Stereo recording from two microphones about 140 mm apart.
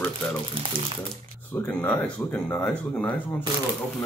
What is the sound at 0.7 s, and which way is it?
Speech, 80° right.